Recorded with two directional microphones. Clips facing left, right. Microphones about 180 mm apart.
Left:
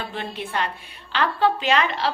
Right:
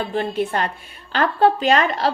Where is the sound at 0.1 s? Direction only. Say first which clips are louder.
Right 8 dB; 45° right (ahead or behind).